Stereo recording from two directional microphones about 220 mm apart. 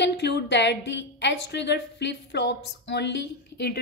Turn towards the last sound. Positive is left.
turn(degrees=50)  # may be behind; listen again after turning